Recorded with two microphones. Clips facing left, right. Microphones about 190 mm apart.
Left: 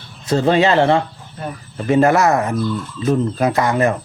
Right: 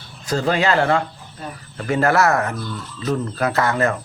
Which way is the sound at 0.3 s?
25° left (ahead or behind).